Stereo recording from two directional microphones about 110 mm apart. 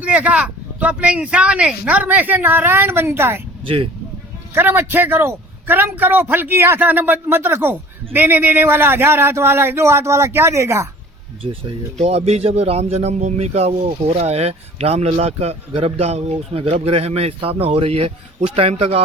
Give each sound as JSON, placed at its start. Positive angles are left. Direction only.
{"t": 0.0, "sound": "speech", "side_deg": -10}
{"t": 3.6, "sound": "speech", "side_deg": -55}
{"t": 4.5, "sound": "a man's voice", "side_deg": -20}
{"t": 11.4, "sound": "speech", "side_deg": -55}
{"t": 11.9, "sound": "speech", "side_deg": -70}